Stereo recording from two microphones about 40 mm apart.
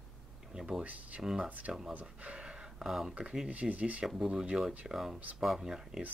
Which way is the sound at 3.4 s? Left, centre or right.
Right.